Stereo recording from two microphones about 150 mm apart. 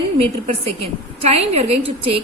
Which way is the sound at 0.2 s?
40° right (ahead or behind).